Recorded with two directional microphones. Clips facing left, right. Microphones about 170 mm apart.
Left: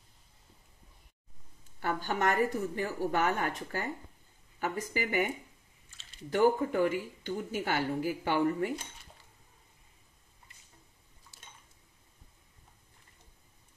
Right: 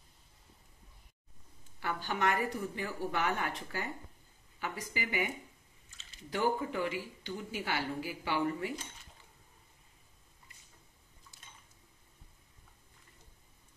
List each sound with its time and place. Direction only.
1.8 s a woman's voice: 45° left (ahead or behind)
6.3 s a woman's voice: 50° left (ahead or behind)